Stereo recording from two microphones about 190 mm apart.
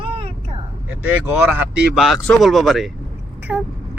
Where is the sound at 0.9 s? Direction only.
10° right (ahead or behind).